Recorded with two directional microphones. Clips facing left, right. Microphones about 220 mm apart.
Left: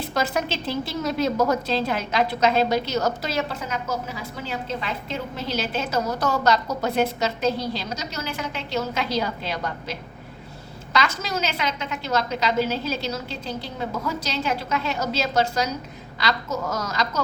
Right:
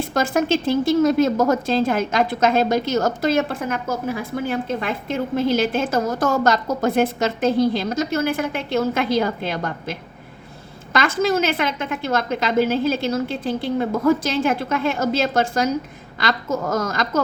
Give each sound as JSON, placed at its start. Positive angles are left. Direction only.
{"t": 0.0, "sound": "a woman's voice", "side_deg": -50}